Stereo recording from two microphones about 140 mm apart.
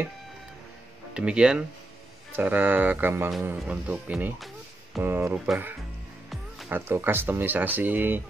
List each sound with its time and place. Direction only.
1.1 s speech: 5° right (ahead or behind)
6.7 s speech: 15° right (ahead or behind)